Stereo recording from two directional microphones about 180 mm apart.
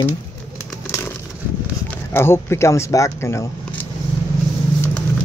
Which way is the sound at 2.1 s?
15° left (ahead or behind).